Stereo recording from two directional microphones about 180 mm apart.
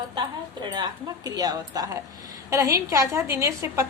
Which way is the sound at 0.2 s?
25° right (ahead or behind).